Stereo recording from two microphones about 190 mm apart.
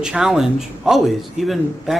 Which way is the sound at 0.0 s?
Centre (ahead or behind).